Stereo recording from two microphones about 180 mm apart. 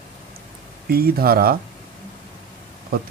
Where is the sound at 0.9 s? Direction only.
60° right (ahead or behind).